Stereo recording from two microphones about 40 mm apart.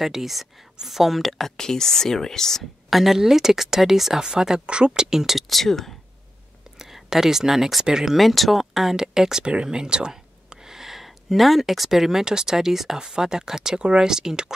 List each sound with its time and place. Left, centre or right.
0.0 s speech: centre
1.6 s speech: centre
2.9 s speech: centre; by 5.0 s right
5.1 s speech: centre
5.5 s speech: centre
6.8 s speech: centre
8.2 s speech: centre
9.4 s speech: right